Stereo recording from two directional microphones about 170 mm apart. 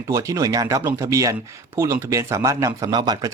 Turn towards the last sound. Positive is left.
turn(degrees=-25)  # may be behind; listen again after turning